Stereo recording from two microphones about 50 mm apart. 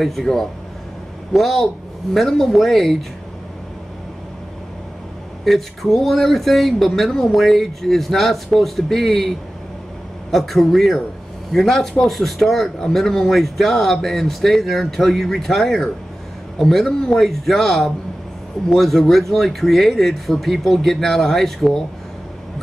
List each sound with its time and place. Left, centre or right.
0.0 s speech: centre
5.4 s speech: centre
10.3 s speech: centre